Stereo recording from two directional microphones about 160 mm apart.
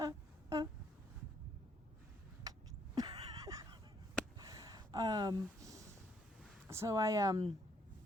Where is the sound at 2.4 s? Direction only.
25° right (ahead or behind).